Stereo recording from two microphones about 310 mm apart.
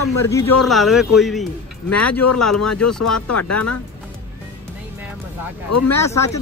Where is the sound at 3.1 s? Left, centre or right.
Left.